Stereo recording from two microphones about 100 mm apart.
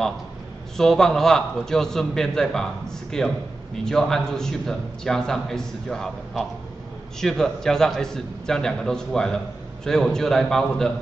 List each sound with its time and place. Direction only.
0.7 s a man's voice: 5° left (ahead or behind)